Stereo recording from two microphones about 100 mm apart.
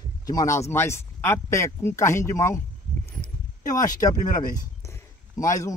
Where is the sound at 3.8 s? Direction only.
35° left (ahead or behind).